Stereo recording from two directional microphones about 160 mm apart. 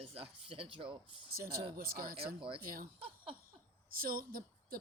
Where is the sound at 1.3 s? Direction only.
65° right (ahead or behind).